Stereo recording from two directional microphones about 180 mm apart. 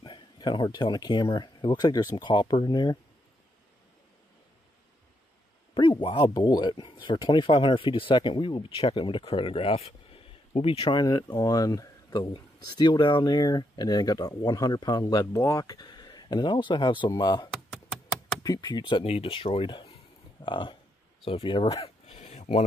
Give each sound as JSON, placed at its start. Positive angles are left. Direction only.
{"t": 0.0, "sound": "speech", "side_deg": 25}
{"t": 5.8, "sound": "speech", "side_deg": 25}
{"t": 21.3, "sound": "a sound", "side_deg": 30}